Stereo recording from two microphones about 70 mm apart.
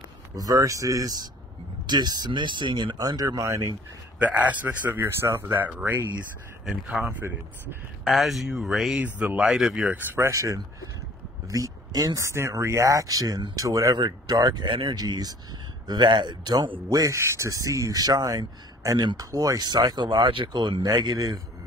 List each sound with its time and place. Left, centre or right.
0.4 s speech: right
1.9 s speech: right
4.2 s speech: right
7.1 s speech: right
8.0 s speech: centre
9.9 s speech: right
10.3 s speech: right
12.2 s speech: right
13.9 s speech: right
15.9 s speech: right
17.1 s speech: right
17.5 s speech: right